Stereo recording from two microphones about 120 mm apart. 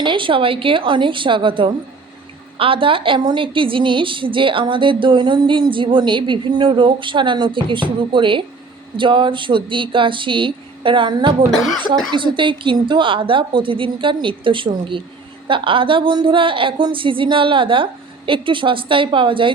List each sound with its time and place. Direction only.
0.0 s a woman's voice: 45° right (ahead or behind)